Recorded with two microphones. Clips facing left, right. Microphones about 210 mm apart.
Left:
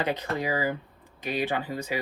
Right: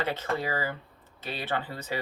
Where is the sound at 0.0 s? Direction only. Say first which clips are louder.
Left 2 dB; 15° left (ahead or behind).